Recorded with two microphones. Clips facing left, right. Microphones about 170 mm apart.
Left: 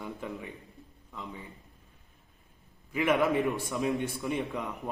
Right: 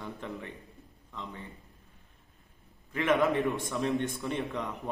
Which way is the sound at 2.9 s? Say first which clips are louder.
Even; 5° left (ahead or behind).